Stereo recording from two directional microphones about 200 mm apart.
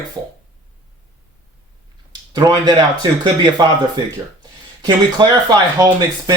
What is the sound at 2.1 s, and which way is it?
Speech, 20° right (ahead or behind).